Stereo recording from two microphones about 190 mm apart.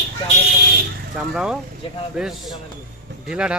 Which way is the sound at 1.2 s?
5° right (ahead or behind).